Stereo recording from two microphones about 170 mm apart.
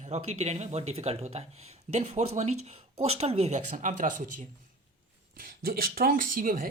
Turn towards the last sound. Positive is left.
turn(degrees=-55)  # may be behind; listen again after turning